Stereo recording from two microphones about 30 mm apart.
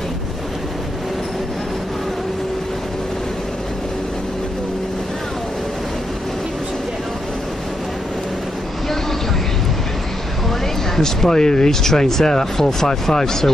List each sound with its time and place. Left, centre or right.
11.0 s speech: centre